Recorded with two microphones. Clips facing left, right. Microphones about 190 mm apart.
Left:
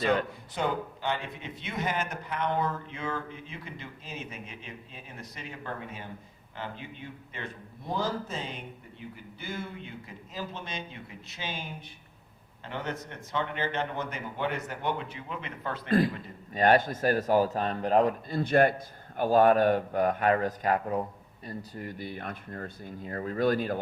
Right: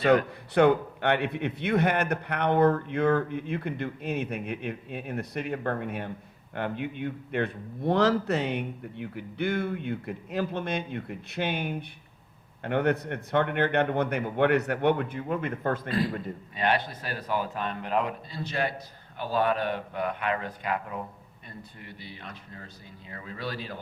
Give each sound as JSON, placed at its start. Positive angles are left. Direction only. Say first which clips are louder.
{"t": 0.5, "sound": "a man's voice", "louder": "right 10 dB", "side_deg": -65}
{"t": 15.9, "sound": "speech", "louder": "left 3 dB", "side_deg": 50}